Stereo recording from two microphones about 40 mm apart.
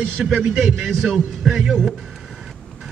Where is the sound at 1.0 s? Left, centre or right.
Centre.